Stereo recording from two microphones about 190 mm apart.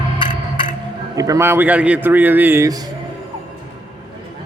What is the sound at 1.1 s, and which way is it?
A man's voice, 20° right (ahead or behind).